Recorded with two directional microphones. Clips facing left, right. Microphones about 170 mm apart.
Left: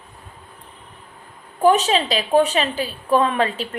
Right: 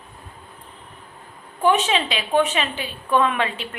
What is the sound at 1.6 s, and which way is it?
A woman's voice, 40° left (ahead or behind).